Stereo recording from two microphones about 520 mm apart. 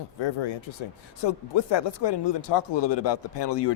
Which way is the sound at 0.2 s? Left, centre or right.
Left.